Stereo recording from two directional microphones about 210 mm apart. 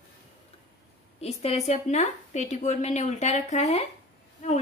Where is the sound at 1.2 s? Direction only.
30° left (ahead or behind).